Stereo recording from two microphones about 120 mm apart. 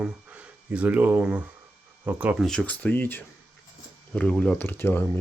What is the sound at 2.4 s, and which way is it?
Speech, 5° left (ahead or behind).